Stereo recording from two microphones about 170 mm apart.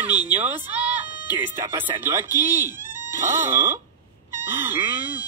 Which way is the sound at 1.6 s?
15° right (ahead or behind).